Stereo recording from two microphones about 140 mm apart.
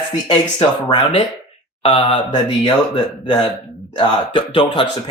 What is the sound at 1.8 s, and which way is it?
Speech, 40° left (ahead or behind).